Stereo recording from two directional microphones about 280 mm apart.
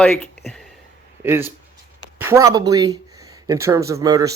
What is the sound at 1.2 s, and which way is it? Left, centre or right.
Speech, centre.